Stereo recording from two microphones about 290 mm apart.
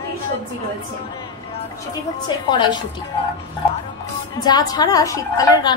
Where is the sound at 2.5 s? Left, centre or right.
Centre.